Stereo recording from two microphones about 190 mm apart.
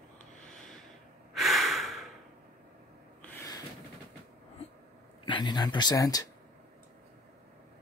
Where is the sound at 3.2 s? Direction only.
15° left (ahead or behind).